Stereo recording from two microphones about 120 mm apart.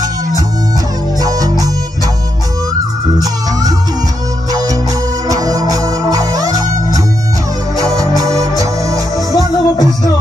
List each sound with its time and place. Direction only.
4.5 s music: 30° right (ahead or behind)
8.2 s organ: 30° right (ahead or behind)
9.3 s music: 30° left (ahead or behind)